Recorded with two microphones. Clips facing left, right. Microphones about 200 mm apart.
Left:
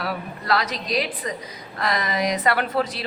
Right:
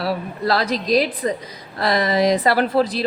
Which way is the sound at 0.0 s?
30° right (ahead or behind).